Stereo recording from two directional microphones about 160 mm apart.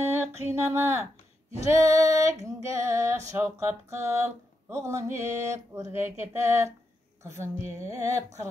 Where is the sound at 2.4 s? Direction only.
15° right (ahead or behind).